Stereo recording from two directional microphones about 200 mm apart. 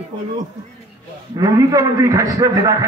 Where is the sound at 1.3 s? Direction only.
20° right (ahead or behind).